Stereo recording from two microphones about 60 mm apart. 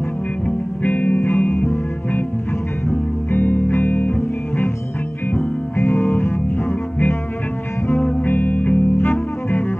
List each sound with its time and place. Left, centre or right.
0.8 s music: left
3.3 s music: left
8.2 s music: left